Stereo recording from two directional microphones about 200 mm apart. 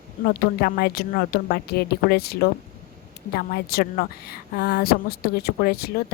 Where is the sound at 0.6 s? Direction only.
50° left (ahead or behind).